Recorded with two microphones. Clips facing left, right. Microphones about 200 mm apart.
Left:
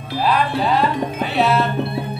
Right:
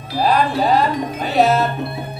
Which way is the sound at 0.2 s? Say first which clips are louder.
Right 2 dB; 40° right (ahead or behind).